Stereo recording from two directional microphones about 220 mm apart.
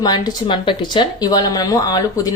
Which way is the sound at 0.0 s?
20° left (ahead or behind).